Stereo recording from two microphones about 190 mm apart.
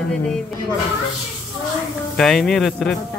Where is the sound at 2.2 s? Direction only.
Centre (ahead or behind).